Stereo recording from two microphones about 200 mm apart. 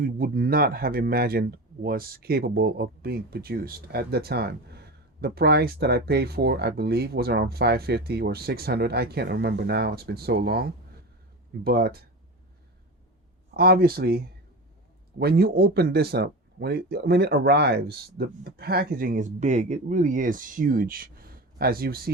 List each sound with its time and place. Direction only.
0.0 s speech: 45° right (ahead or behind)
13.5 s speech: 50° right (ahead or behind)